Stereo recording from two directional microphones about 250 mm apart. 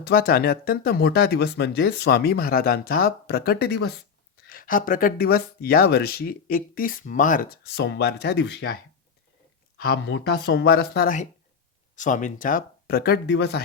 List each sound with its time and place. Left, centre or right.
0.0 s speech: left